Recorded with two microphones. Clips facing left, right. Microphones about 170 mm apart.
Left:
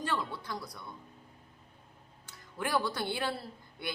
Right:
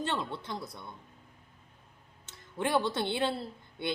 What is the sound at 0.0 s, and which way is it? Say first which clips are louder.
Speech: right 1 dB; 25° right (ahead or behind).